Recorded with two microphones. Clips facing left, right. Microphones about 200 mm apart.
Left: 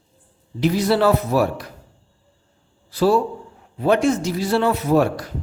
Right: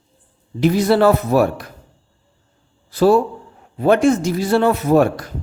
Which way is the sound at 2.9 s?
50° right (ahead or behind).